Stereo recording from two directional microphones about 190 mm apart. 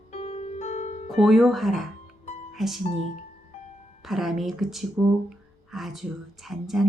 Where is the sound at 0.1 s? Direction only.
30° left (ahead or behind).